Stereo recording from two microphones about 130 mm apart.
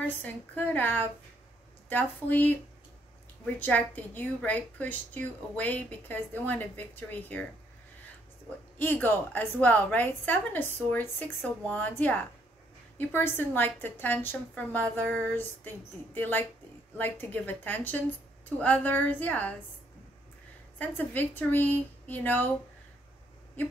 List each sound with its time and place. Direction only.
0.0 s a woman's voice: 15° left (ahead or behind)
3.5 s a woman's voice: 15° left (ahead or behind)
8.7 s a woman's voice: 15° left (ahead or behind)
20.7 s a woman's voice: 15° left (ahead or behind)